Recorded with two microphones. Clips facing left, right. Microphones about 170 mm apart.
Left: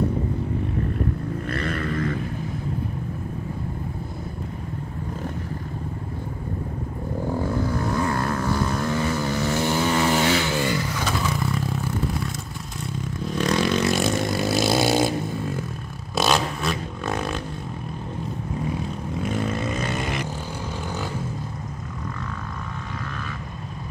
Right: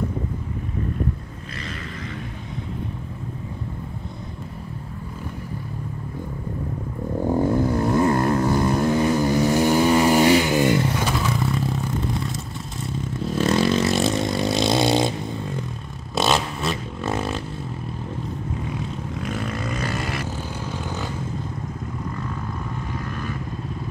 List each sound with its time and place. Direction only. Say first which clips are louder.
1.6 s vehicle: left 7 dB; 55° left (ahead or behind)
7.3 s vehicle: right 6 dB; 20° right (ahead or behind)
11.2 s vehicle: right 2 dB; centre (ahead or behind)
16.2 s vehicle: even; centre (ahead or behind)
19.3 s vehicle: left 4 dB; centre (ahead or behind)
19.8 s vehicle: even; 20° left (ahead or behind)